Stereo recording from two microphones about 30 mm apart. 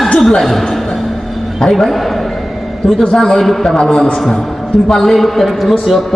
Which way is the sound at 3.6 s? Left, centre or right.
Left.